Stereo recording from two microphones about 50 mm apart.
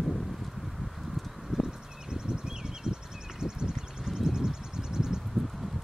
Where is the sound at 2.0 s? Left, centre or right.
Centre.